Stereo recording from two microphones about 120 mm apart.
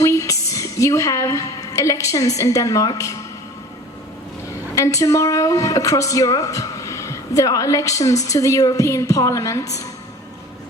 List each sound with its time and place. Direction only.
0.0 s a woman's voice: 25° left (ahead or behind)
4.7 s a woman's voice: 25° left (ahead or behind)